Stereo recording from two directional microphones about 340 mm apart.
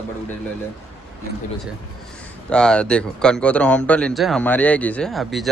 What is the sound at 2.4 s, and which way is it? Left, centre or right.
Speech, centre.